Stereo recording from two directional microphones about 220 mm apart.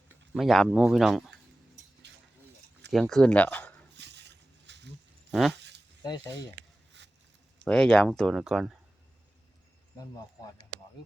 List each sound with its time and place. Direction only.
0.3 s speech: centre (ahead or behind)
2.9 s speech: centre (ahead or behind)
3.9 s a sound: 50° right (ahead or behind)
5.3 s a sound: centre (ahead or behind)
5.5 s zipper: 50° right (ahead or behind)
6.0 s speech: 20° left (ahead or behind)
7.0 s a sound: 55° right (ahead or behind)
7.7 s speech: 5° left (ahead or behind)
10.0 s speech: 15° left (ahead or behind)